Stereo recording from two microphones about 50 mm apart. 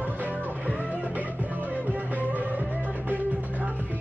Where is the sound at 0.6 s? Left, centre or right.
Left.